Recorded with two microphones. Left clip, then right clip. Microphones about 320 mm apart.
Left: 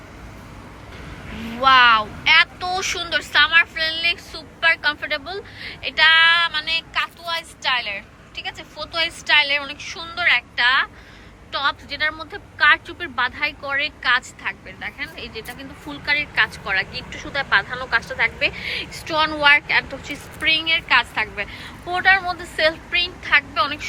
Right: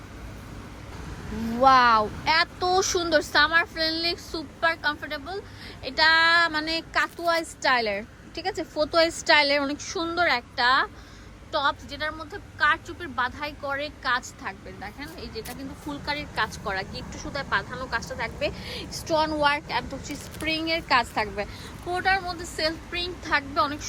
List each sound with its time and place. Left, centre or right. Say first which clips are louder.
1.6 s a woman's voice: left 4 dB; centre